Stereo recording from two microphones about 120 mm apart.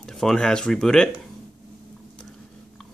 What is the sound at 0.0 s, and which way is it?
Speech, 5° left (ahead or behind).